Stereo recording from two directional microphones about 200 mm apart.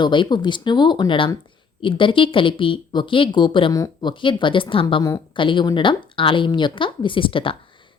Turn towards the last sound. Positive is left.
turn(degrees=25)  # may be behind; listen again after turning